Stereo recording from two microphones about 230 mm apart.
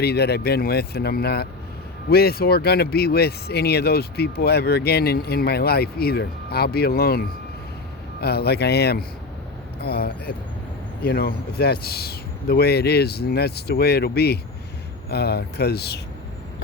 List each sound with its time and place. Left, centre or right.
0.0 s speech: left